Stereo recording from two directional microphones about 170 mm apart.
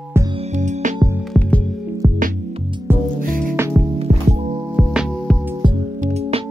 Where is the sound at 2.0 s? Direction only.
25° right (ahead or behind).